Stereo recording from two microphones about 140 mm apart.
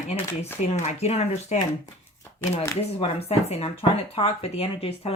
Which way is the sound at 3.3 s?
50° left (ahead or behind).